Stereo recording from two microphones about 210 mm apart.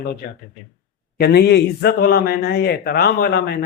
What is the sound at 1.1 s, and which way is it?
A man's voice, 50° left (ahead or behind).